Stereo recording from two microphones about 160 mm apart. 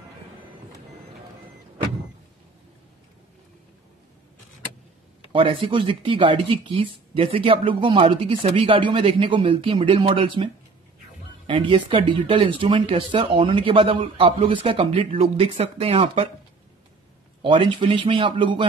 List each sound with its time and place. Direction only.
5.3 s speech: 35° right (ahead or behind)
17.4 s speech: 30° right (ahead or behind)